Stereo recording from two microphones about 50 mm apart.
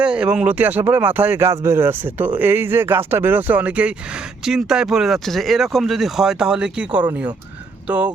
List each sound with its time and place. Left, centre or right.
0.0 s speech: right
0.5 s speech: right
1.4 s speech: right
3.6 s speech: right
4.4 s speech: centre; by 8.1 s right